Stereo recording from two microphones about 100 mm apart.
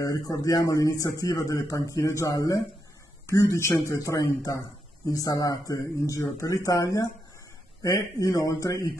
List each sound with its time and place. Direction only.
0.0 s a man's voice: 35° left (ahead or behind)